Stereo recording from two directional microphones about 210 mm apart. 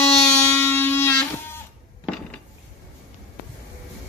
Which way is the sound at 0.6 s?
10° left (ahead or behind).